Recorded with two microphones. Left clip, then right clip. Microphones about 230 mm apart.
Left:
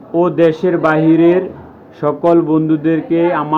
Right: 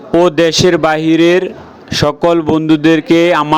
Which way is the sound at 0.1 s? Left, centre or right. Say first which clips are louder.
Right 3 dB; right.